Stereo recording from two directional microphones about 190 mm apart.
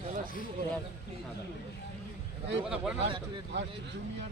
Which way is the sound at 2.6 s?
5° right (ahead or behind).